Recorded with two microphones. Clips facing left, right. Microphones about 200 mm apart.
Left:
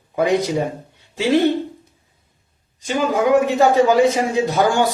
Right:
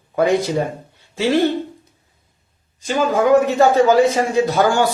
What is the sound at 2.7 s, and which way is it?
A man's voice, 15° left (ahead or behind).